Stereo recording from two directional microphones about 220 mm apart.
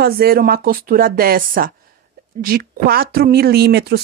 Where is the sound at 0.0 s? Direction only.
45° right (ahead or behind).